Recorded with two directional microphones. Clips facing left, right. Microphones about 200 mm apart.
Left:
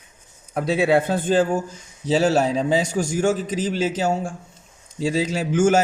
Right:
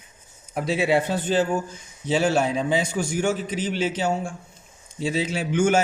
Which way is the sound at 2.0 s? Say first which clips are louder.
Left 3 dB; 40° left (ahead or behind).